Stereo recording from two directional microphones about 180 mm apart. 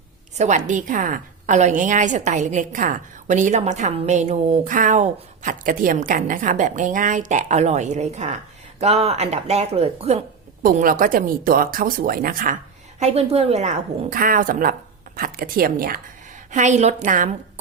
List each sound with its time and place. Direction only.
0.3 s a woman's voice: 40° right (ahead or behind)
10.6 s a woman's voice: 50° right (ahead or behind)
13.0 s a woman's voice: 35° right (ahead or behind); by 16.0 s 55° right (ahead or behind)
16.5 s a woman's voice: 40° right (ahead or behind)